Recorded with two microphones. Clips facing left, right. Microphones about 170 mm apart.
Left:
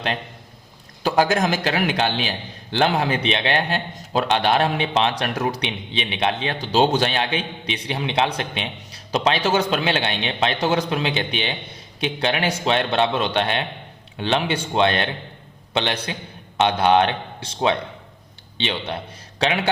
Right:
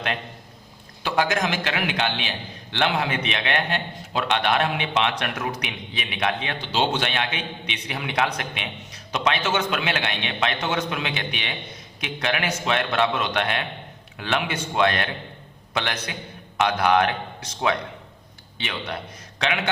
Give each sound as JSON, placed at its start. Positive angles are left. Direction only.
{"t": 1.0, "sound": "a man's voice", "side_deg": 35}